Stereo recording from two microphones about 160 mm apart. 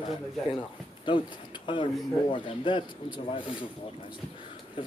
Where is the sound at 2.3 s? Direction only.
30° left (ahead or behind).